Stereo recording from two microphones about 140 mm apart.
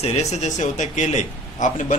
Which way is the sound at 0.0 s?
50° left (ahead or behind).